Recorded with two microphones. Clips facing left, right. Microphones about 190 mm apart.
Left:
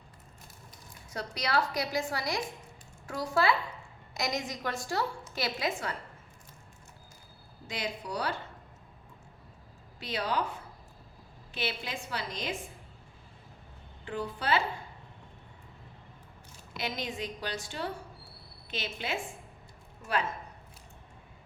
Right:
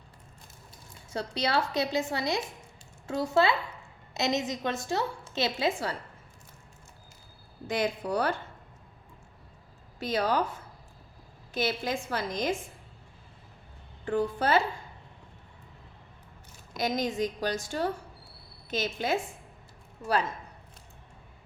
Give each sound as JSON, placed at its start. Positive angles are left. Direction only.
{"t": 1.1, "sound": "a woman's voice", "side_deg": -30}
{"t": 7.7, "sound": "a woman's voice", "side_deg": -50}
{"t": 10.0, "sound": "a woman's voice", "side_deg": -45}
{"t": 11.5, "sound": "a woman's voice", "side_deg": -45}
{"t": 14.0, "sound": "a woman's voice", "side_deg": -45}
{"t": 16.7, "sound": "a woman's voice", "side_deg": -45}